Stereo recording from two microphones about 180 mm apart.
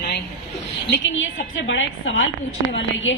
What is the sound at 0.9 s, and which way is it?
A woman's voice, 90° left.